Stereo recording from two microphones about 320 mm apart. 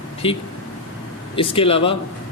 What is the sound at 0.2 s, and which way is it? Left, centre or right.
Speech, centre.